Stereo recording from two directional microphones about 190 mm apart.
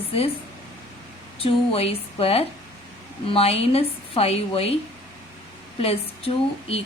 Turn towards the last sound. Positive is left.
turn(degrees=30)  # may be behind; listen again after turning